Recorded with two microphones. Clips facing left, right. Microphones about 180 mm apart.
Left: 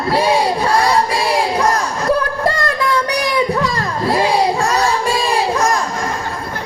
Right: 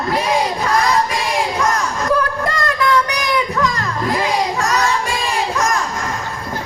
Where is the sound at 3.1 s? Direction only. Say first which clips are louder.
Left 3 dB; 30° left (ahead or behind).